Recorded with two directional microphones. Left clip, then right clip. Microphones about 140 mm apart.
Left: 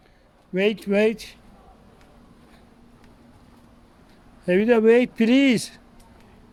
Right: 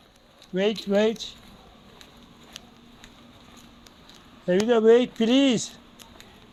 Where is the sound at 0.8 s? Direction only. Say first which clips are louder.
Left 2 dB; 75° left (ahead or behind).